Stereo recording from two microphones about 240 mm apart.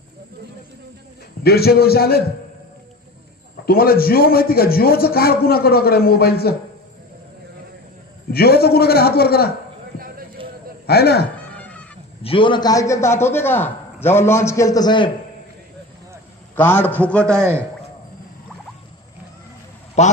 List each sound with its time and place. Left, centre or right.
1.5 s a man's voice: left
3.7 s a man's voice: left
8.3 s a man's voice: left
10.4 s a sound: right
10.8 s a man's voice: left
11.4 s cat: centre
12.2 s a man's voice: left
16.6 s a man's voice: centre
20.0 s speech: left